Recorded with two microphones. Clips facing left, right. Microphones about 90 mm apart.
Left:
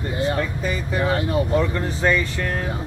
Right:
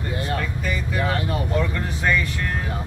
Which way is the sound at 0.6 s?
25° left (ahead or behind).